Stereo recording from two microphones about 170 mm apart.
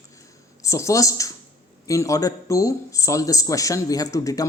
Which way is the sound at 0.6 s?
15° left (ahead or behind).